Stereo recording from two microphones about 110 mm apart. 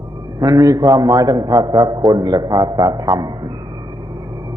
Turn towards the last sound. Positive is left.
turn(degrees=-35)  # may be behind; listen again after turning